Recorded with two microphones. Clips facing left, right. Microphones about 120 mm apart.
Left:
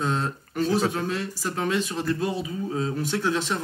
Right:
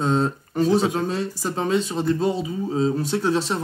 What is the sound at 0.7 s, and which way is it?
Speech, 15° right (ahead or behind).